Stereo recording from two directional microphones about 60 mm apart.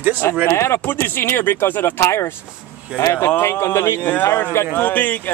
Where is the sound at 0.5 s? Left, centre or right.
Left.